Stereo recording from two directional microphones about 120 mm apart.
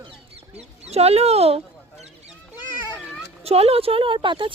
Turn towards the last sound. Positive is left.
turn(degrees=-45)  # may be behind; listen again after turning